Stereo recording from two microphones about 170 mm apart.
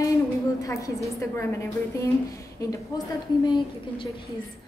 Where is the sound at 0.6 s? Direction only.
20° left (ahead or behind).